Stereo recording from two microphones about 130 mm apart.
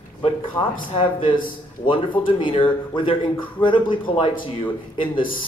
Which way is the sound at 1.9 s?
40° left (ahead or behind).